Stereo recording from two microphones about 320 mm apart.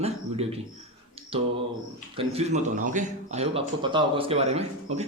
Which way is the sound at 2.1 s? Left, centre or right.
Centre.